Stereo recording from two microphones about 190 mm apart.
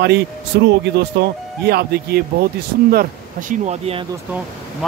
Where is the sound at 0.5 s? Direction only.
65° right (ahead or behind); by 4.0 s 35° right (ahead or behind).